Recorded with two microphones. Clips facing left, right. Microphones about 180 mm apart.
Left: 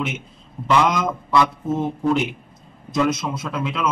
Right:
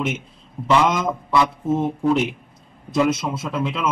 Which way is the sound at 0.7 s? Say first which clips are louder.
Right 1 dB; centre (ahead or behind).